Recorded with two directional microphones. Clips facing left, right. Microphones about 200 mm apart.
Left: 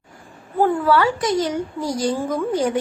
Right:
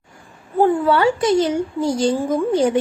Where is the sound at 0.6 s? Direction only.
25° right (ahead or behind).